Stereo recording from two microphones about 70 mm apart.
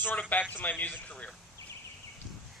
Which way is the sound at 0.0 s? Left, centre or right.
Left.